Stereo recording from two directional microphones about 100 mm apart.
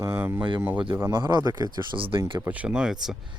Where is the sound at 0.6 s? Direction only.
20° right (ahead or behind).